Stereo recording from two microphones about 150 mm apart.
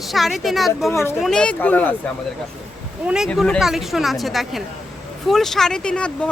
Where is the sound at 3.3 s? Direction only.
Centre (ahead or behind).